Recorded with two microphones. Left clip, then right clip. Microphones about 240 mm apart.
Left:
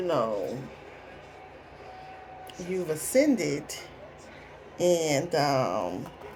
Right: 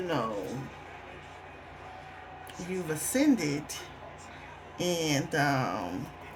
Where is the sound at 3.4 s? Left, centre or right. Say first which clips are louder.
Left 3 dB; right.